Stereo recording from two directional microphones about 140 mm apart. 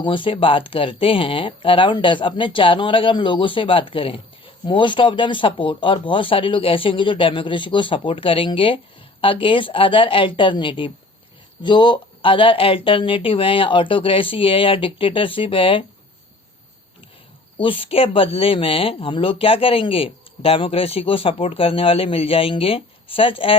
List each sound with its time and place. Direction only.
0.0 s speech: 35° left (ahead or behind)
17.6 s speech: 40° left (ahead or behind)